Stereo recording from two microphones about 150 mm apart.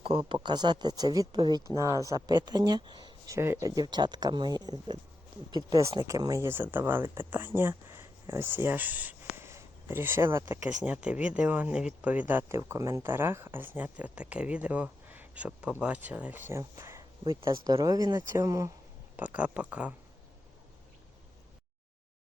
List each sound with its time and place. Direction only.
0.0 s speech: 35° right (ahead or behind)
3.3 s speech: 20° right (ahead or behind)
6.0 s speech: 25° right (ahead or behind); by 20.0 s 10° right (ahead or behind)